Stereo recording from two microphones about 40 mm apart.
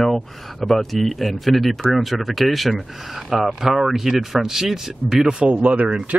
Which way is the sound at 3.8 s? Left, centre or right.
Centre.